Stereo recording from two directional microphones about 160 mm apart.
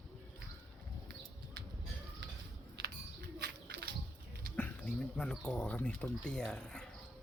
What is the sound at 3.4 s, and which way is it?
Bird, 90° right.